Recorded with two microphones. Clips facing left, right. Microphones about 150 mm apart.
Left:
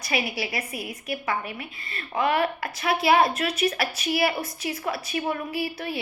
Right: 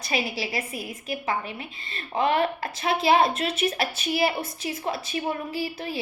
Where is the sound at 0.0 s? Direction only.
25° right (ahead or behind).